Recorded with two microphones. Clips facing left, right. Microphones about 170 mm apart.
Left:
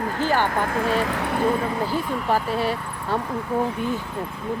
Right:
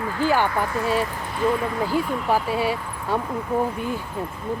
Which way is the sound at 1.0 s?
75° left (ahead or behind).